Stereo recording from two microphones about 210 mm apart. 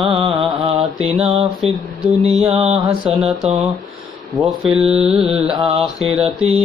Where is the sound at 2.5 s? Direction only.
30° right (ahead or behind).